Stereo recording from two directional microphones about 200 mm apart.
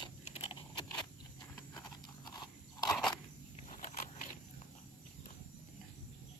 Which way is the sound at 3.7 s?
35° left (ahead or behind).